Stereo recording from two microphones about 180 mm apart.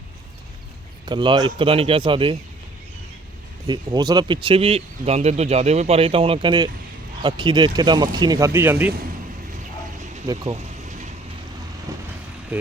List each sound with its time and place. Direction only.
1.0 s speech: 25° right (ahead or behind)
3.7 s speech: 25° right (ahead or behind)
10.2 s speech: 25° right (ahead or behind)